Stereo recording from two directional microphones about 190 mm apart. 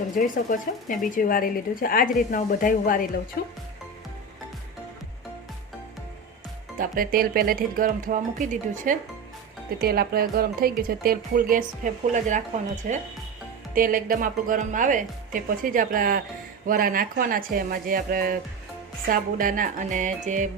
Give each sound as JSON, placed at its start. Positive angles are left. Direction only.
{"t": 0.2, "sound": "speech", "side_deg": 45}
{"t": 3.4, "sound": "speech", "side_deg": 55}
{"t": 6.7, "sound": "speech", "side_deg": -45}
{"t": 9.8, "sound": "speech", "side_deg": -55}